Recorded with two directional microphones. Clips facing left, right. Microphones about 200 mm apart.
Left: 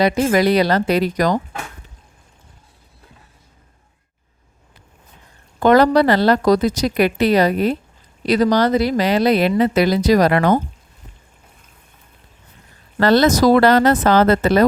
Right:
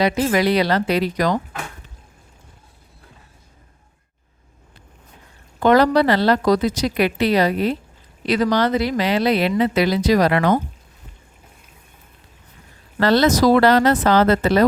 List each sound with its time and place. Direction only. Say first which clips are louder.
0.0 s speech: left 3 dB; 45° left (ahead or behind)
5.5 s speech: left 2 dB; 45° left (ahead or behind)
13.0 s speech: left 2 dB; 50° left (ahead or behind)